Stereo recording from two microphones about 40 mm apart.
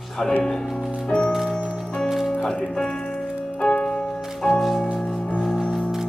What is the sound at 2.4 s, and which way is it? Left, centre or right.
Music, centre.